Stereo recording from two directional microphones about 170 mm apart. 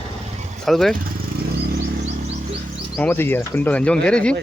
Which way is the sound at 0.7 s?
Centre (ahead or behind).